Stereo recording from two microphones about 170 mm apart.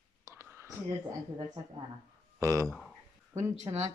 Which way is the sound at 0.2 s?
15° right (ahead or behind).